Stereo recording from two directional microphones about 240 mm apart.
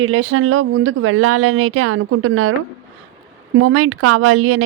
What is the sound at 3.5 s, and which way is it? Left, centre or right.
Speech, right.